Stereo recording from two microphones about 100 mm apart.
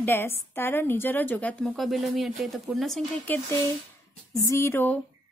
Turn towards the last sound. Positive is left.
turn(degrees=20)  # may be behind; listen again after turning